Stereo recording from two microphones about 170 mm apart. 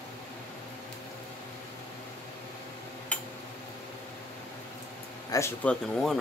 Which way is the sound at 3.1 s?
5° left (ahead or behind).